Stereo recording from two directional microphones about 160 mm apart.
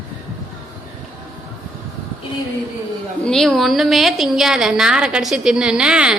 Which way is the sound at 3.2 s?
Centre (ahead or behind).